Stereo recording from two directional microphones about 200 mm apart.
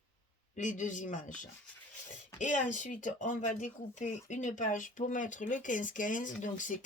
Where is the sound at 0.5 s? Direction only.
40° left (ahead or behind).